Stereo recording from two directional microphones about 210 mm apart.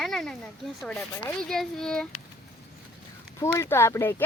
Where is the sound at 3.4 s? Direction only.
15° left (ahead or behind).